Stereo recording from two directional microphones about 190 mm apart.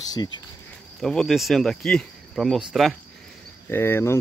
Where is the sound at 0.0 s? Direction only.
20° left (ahead or behind).